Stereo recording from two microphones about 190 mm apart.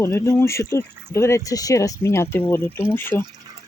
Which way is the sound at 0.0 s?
15° left (ahead or behind).